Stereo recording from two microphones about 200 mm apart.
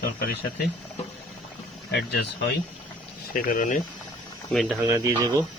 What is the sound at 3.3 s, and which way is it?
Speech, 40° left (ahead or behind).